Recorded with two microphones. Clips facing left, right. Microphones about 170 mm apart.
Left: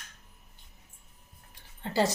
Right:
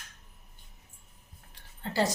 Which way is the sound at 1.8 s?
20° left (ahead or behind).